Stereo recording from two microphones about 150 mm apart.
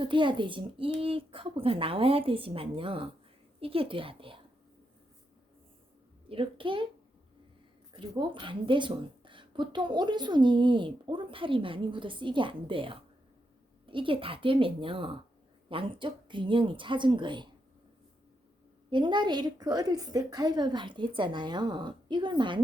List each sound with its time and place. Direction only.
0.0 s speech: 30° right (ahead or behind)
6.2 s speech: 35° right (ahead or behind)
7.9 s speech: 35° right (ahead or behind)
18.9 s a woman's voice: 30° right (ahead or behind)